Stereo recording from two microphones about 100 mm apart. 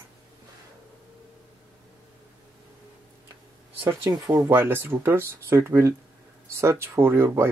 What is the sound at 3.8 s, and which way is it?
Speech, 20° right (ahead or behind).